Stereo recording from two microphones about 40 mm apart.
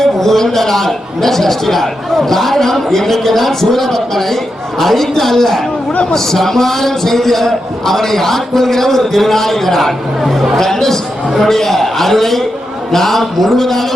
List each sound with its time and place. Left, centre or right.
0.0 s a man's voice: centre
5.9 s a man's voice: left
6.1 s a man's voice: centre
10.6 s a man's voice: centre